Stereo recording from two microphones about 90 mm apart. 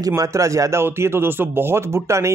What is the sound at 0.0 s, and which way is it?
Speech, 35° right (ahead or behind).